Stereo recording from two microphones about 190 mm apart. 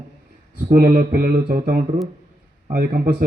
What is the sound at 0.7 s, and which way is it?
A man's voice, 50° right (ahead or behind).